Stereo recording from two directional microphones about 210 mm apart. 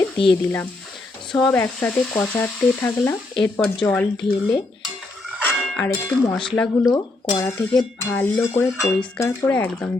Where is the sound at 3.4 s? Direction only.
5° left (ahead or behind).